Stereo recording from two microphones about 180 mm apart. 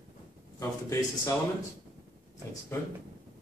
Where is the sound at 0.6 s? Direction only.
15° left (ahead or behind).